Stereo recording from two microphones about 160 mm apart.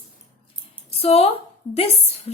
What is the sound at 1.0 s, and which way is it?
Speech, 40° left (ahead or behind).